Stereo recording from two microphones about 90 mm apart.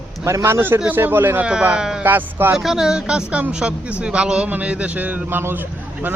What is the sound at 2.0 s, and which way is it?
Speech, 20° right (ahead or behind).